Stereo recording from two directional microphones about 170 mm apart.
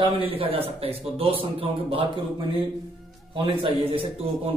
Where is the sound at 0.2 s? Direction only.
35° right (ahead or behind).